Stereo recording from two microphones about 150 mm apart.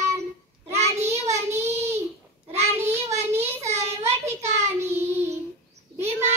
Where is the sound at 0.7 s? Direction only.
45° right (ahead or behind).